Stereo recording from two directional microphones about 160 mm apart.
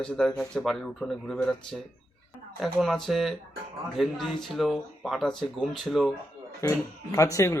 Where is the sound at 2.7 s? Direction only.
Centre (ahead or behind).